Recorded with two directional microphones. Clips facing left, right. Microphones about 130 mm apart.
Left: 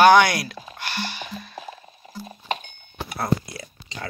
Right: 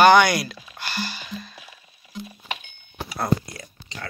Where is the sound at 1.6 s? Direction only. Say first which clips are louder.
Left 10 dB; 45° left (ahead or behind).